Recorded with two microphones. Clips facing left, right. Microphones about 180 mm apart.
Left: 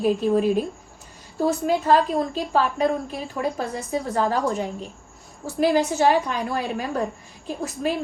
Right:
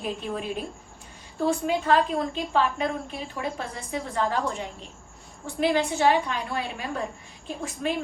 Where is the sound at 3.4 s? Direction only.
40° left (ahead or behind).